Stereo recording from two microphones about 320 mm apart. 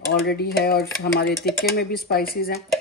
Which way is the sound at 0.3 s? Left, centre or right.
Left.